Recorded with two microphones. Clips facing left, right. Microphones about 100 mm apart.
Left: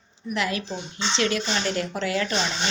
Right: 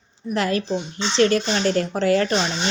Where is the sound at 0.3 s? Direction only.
40° right (ahead or behind).